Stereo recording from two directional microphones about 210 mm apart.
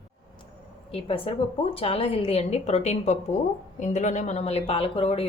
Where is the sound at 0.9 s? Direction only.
25° left (ahead or behind).